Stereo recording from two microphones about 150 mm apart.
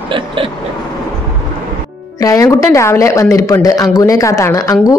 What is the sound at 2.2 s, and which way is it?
Speech, 20° left (ahead or behind).